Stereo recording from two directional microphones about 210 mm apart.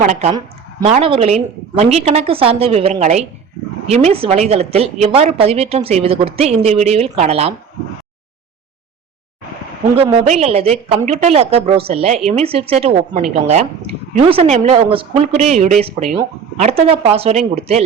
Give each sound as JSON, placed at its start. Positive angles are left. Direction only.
{"t": 0.0, "sound": "a woman's voice", "side_deg": -35}
{"t": 9.9, "sound": "a woman's voice", "side_deg": -30}